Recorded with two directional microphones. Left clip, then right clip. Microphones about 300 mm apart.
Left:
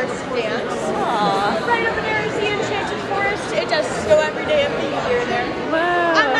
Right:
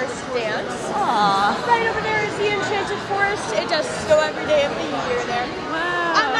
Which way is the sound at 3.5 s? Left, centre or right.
Right.